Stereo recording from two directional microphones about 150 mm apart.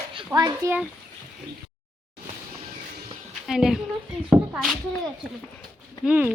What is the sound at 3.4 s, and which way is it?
Speech, 5° right (ahead or behind).